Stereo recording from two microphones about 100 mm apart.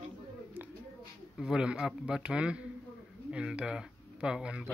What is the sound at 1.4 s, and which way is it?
Speech, 10° right (ahead or behind).